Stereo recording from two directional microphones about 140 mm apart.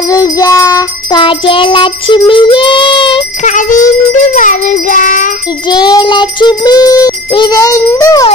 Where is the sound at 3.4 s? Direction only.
65° left (ahead or behind).